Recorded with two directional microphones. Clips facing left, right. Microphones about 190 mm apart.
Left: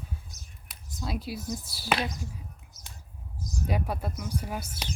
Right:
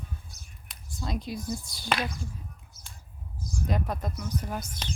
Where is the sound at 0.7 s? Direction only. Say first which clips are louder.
Even; 5° left (ahead or behind).